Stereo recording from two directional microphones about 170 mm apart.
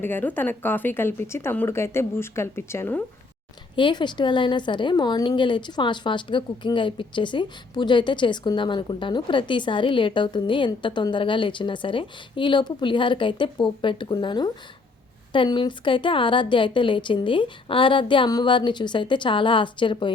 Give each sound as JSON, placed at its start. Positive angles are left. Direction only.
{"t": 0.0, "sound": "speech", "side_deg": 10}
{"t": 3.8, "sound": "a woman's voice", "side_deg": 25}